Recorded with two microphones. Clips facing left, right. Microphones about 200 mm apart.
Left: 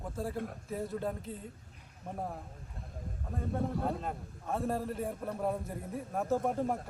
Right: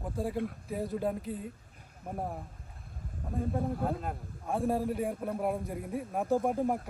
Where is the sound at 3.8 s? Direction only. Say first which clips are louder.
Right 2 dB; 5° right (ahead or behind).